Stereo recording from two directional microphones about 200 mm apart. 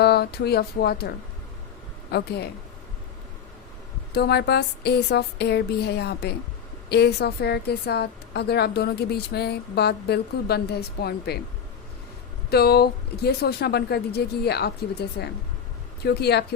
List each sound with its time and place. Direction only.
0.0 s a woman's voice: 55° left (ahead or behind)
4.1 s a woman's voice: 55° left (ahead or behind)
12.5 s a woman's voice: 50° left (ahead or behind)